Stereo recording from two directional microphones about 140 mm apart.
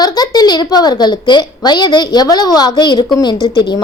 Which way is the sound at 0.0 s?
30° left (ahead or behind).